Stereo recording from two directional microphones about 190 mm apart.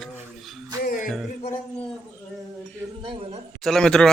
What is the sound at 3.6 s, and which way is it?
Speech, centre (ahead or behind).